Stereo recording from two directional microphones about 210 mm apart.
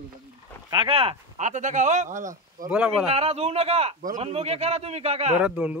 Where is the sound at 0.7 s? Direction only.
25° right (ahead or behind).